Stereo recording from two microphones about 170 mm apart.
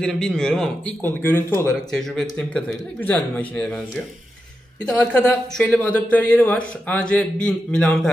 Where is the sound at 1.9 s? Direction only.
Centre (ahead or behind).